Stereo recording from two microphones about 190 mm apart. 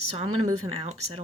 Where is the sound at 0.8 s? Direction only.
35° right (ahead or behind).